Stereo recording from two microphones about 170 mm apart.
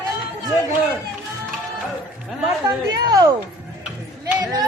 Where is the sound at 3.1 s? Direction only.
20° right (ahead or behind).